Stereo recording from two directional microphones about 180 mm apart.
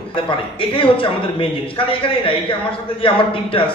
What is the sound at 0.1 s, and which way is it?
A man's voice, 30° left (ahead or behind).